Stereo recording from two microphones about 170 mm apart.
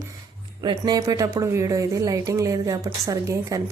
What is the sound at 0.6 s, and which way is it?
Speech, 25° right (ahead or behind).